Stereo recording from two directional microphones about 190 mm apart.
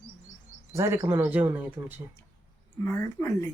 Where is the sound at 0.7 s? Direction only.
15° right (ahead or behind).